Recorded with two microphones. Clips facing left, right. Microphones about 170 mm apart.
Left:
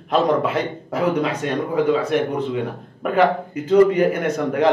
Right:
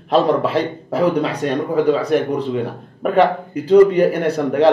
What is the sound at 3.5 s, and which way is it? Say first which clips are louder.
A man's voice: right 5 dB; 35° right (ahead or behind).